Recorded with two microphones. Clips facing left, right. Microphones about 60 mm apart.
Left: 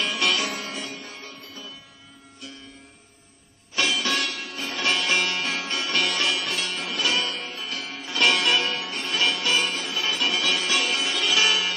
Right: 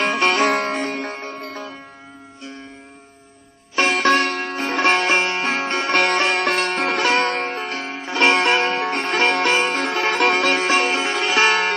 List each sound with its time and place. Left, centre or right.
0.0 s music: right
0.5 s music: right
3.7 s music: right
9.8 s sitar: right